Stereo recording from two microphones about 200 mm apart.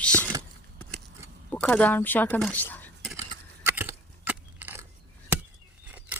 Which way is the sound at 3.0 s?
Centre (ahead or behind).